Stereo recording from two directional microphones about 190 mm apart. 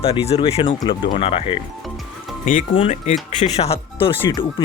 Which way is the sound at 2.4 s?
45° left (ahead or behind).